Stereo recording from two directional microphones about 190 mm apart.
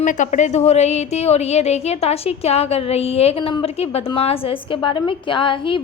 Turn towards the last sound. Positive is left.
turn(degrees=25)  # may be behind; listen again after turning